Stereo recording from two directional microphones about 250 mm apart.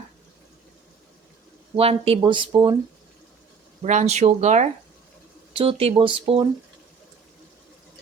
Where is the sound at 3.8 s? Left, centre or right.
Right.